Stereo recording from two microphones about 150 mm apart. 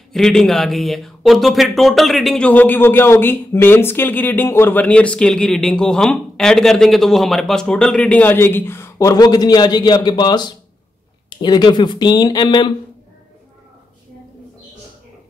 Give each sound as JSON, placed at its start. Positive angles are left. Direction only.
{"t": 0.1, "sound": "speech", "side_deg": 5}